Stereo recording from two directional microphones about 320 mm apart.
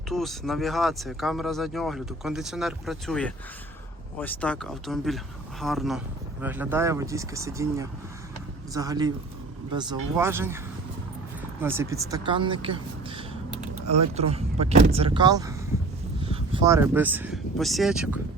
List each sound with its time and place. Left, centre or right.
0.1 s speech: centre
10.2 s speech: centre
11.6 s speech: centre
13.8 s speech: right
14.2 s speech: centre